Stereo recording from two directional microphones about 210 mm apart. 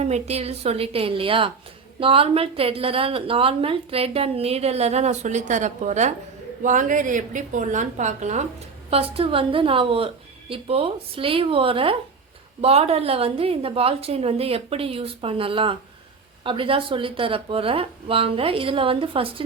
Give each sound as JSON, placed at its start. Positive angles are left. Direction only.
{"t": 0.0, "sound": "a woman's voice", "side_deg": -30}